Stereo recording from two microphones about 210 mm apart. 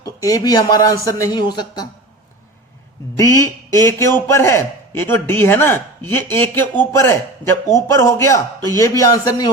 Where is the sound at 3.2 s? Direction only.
15° left (ahead or behind).